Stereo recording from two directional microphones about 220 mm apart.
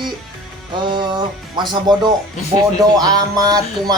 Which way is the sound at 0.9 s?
20° right (ahead or behind).